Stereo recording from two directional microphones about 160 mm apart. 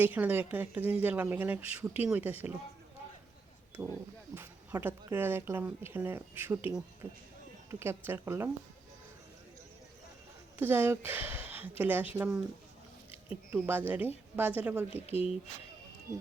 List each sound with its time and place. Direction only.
0.0 s a woman's voice: 10° right (ahead or behind)
3.8 s a woman's voice: 15° right (ahead or behind)
10.6 s a woman's voice: 15° right (ahead or behind)
13.5 s a woman's voice: 15° right (ahead or behind)
15.0 s speech: 40° left (ahead or behind)